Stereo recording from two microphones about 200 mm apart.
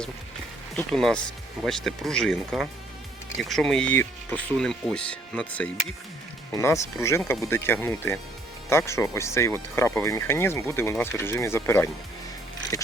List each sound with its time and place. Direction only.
0.8 s speech: centre (ahead or behind)